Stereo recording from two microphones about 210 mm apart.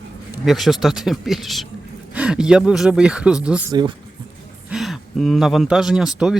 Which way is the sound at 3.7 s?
20° right (ahead or behind).